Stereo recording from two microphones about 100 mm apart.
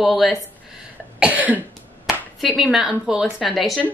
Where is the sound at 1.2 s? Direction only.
15° right (ahead or behind).